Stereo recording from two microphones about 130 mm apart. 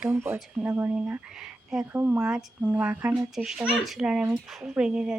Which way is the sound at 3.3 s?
5° right (ahead or behind).